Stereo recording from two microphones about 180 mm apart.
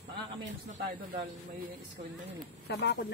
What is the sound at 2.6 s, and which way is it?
Speech, 65° left (ahead or behind).